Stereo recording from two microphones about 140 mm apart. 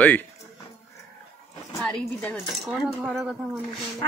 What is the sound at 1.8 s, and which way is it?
Speech, 5° left (ahead or behind).